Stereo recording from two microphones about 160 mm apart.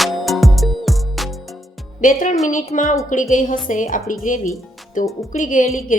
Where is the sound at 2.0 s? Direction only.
55° left (ahead or behind).